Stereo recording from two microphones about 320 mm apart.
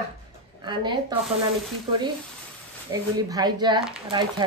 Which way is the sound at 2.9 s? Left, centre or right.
Centre.